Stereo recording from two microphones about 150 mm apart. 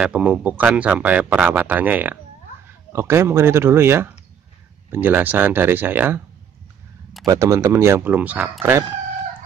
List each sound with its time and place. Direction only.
0.0 s speech: 5° right (ahead or behind)
7.2 s speech: 20° right (ahead or behind)